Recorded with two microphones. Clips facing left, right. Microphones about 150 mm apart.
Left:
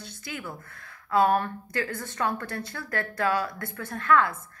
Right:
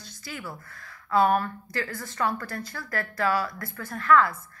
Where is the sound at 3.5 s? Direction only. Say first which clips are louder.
Left 1 dB; 30° left (ahead or behind).